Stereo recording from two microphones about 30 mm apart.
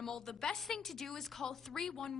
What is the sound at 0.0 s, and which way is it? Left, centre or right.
A woman's voice, centre.